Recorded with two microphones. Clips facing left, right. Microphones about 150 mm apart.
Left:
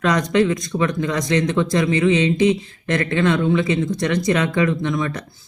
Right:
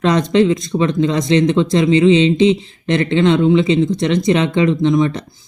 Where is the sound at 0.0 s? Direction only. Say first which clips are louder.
Right 4 dB; 25° right (ahead or behind).